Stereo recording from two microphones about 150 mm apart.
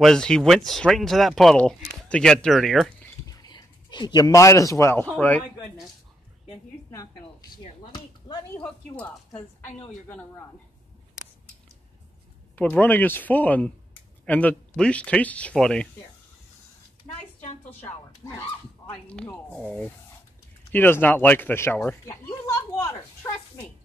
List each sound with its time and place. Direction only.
0.0 s speech: 5° left (ahead or behind)
3.3 s speech: 25° left (ahead or behind); by 5.4 s 10° left (ahead or behind)
7.6 s speech: 30° left (ahead or behind)
8.5 s speech: 10° left (ahead or behind)
12.5 s speech: 10° left (ahead or behind)
17.4 s a sound: 50° left (ahead or behind)
19.0 s speech: 5° left (ahead or behind)
22.0 s a sound: 20° left (ahead or behind)